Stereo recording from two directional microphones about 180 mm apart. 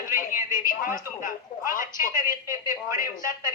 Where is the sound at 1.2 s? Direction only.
50° left (ahead or behind).